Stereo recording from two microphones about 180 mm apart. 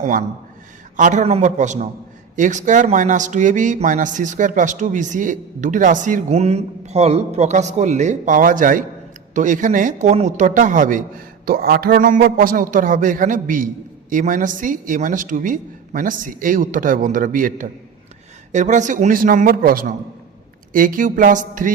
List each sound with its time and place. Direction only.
0.0 s a man's voice: 45° right (ahead or behind)
11.4 s speech: 60° right (ahead or behind)